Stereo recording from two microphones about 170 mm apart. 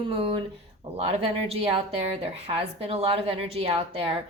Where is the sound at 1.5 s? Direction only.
35° right (ahead or behind).